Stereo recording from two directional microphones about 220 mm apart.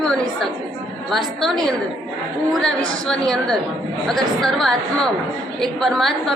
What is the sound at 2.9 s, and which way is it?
A woman's voice, 5° left (ahead or behind).